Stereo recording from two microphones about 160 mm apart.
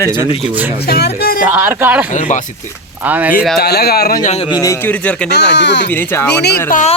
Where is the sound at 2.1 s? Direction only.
50° left (ahead or behind).